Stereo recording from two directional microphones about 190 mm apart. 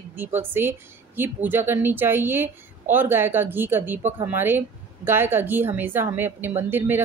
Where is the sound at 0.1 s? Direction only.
10° right (ahead or behind).